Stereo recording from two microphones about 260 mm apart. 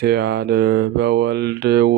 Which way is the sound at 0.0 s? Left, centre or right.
Right.